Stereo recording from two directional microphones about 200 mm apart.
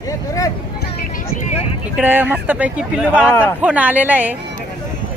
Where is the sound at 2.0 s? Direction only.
10° right (ahead or behind).